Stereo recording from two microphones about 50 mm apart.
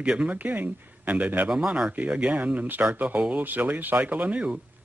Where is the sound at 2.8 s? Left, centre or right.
Right.